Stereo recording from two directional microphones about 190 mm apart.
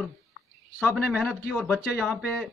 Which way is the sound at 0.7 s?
Centre (ahead or behind).